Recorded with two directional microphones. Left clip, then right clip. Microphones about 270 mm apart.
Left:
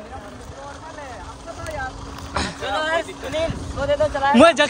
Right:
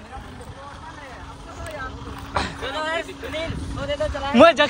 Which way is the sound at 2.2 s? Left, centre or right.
Centre.